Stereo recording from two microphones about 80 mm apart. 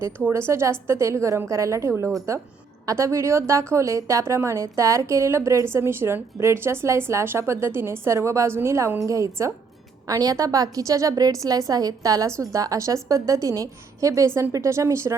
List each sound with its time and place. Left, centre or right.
0.2 s a woman's voice: right